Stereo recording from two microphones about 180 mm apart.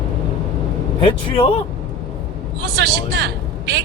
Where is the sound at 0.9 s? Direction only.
30° left (ahead or behind).